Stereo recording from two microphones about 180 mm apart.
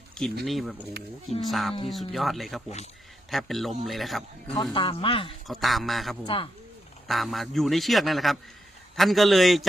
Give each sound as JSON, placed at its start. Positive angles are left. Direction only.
{"t": 0.1, "sound": "a sound", "side_deg": 5}
{"t": 0.4, "sound": "a man's voice", "side_deg": 0}
{"t": 4.7, "sound": "speech", "side_deg": 30}
{"t": 5.5, "sound": "a man's voice", "side_deg": 0}
{"t": 6.2, "sound": "speech", "side_deg": 30}
{"t": 7.1, "sound": "a man's voice", "side_deg": 0}